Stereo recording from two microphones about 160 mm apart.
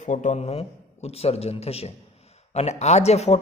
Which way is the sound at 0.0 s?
50° left (ahead or behind).